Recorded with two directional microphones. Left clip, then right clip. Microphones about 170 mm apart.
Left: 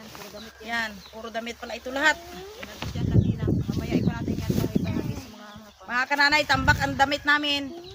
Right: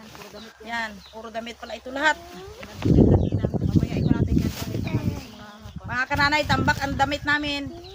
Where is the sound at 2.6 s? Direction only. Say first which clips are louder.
Left 1 dB; 5° right (ahead or behind).